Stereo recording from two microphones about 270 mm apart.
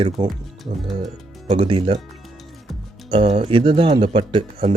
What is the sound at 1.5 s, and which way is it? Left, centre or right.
Speech, centre.